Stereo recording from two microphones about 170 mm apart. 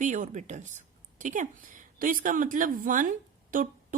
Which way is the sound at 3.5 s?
50° right (ahead or behind).